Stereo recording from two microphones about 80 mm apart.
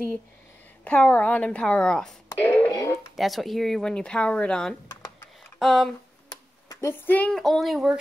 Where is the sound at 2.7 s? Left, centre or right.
Left.